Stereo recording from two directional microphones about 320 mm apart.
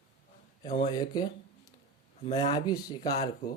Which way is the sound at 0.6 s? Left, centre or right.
Centre.